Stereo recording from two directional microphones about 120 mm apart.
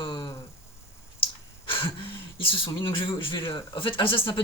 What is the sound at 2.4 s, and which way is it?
A man's voice, 45° left (ahead or behind).